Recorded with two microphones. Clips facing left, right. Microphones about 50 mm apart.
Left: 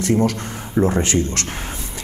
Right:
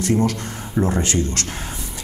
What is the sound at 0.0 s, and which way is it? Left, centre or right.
A man's voice, left.